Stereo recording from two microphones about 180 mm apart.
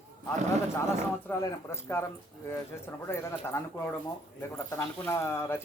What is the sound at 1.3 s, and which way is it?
Speech, 15° left (ahead or behind).